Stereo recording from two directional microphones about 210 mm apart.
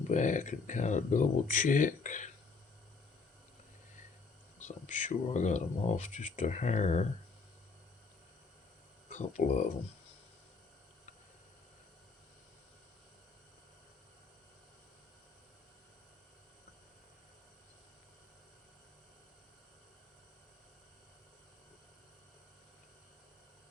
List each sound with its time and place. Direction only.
0.1 s speech: 35° left (ahead or behind)
4.5 s speech: 35° left (ahead or behind)
9.0 s speech: 35° left (ahead or behind)